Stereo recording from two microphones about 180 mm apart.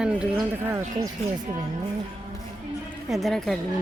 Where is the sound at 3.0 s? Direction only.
Centre (ahead or behind).